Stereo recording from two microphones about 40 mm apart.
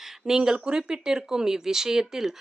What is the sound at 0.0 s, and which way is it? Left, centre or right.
Speech, centre.